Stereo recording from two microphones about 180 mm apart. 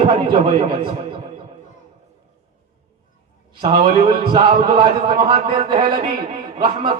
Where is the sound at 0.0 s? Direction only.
25° right (ahead or behind).